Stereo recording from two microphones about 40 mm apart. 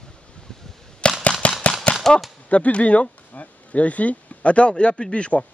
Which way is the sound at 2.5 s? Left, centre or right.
Left.